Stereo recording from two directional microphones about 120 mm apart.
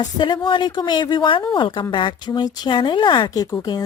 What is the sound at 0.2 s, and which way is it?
Speech, 40° left (ahead or behind).